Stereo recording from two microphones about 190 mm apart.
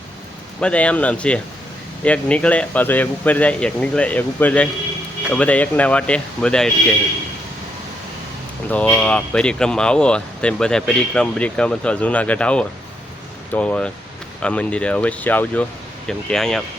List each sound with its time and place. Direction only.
0.6 s speech: 5° left (ahead or behind)
8.7 s speech: 5° left (ahead or behind)